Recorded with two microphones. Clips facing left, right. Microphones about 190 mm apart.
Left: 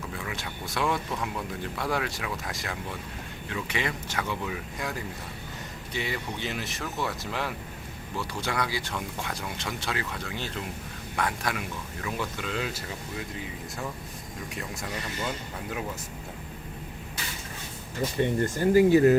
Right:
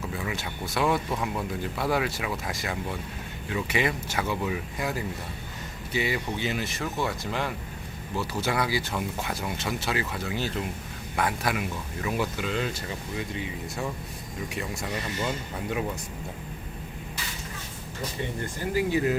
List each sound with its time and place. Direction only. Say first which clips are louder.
0.3 s speech: right 3 dB; centre (ahead or behind)
14.5 s speech: right 3 dB; centre (ahead or behind)
18.4 s speech: left 8 dB; 45° left (ahead or behind)